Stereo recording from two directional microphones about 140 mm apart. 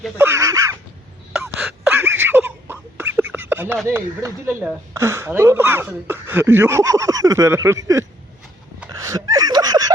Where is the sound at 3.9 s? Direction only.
20° right (ahead or behind).